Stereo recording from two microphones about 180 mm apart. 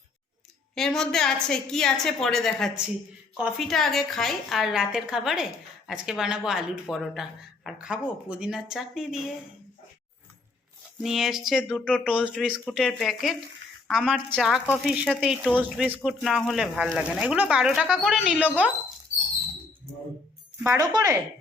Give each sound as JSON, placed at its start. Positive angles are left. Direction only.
{"t": 0.8, "sound": "speech", "side_deg": 5}
{"t": 11.0, "sound": "speech", "side_deg": 0}
{"t": 11.9, "sound": "speech", "side_deg": 10}
{"t": 12.1, "sound": "speech", "side_deg": -5}
{"t": 20.7, "sound": "speech", "side_deg": -20}